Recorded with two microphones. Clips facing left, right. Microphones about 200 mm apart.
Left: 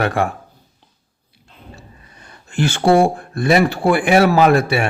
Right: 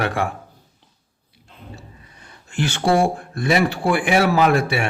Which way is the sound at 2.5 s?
45° left (ahead or behind).